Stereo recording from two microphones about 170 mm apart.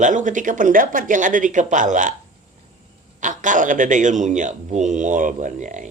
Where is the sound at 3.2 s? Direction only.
50° right (ahead or behind).